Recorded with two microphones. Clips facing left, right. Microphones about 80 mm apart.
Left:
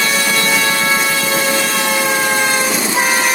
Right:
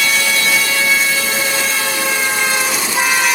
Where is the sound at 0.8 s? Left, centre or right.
Left.